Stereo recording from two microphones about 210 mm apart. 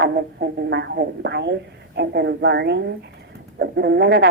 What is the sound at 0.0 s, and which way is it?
Speech, 50° right (ahead or behind).